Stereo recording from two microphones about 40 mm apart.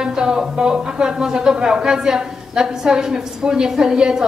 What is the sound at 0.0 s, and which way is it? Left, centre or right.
A woman's voice, centre.